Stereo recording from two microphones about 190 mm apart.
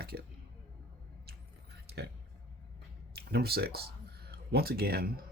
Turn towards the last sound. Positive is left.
turn(degrees=-55)  # may be behind; listen again after turning